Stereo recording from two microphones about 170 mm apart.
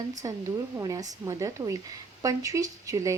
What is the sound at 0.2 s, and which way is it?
Speech, 20° right (ahead or behind).